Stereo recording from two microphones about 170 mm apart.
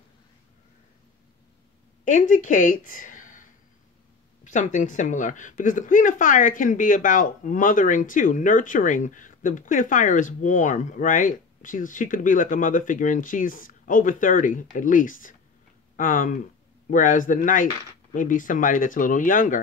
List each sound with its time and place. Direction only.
2.0 s a woman's voice: 50° left (ahead or behind)
4.5 s a woman's voice: 45° left (ahead or behind)